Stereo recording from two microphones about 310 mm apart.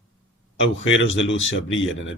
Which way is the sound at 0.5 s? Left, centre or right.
Left.